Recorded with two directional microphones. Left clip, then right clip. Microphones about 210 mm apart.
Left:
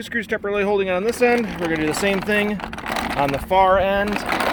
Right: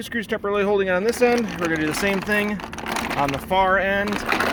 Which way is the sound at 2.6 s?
25° left (ahead or behind).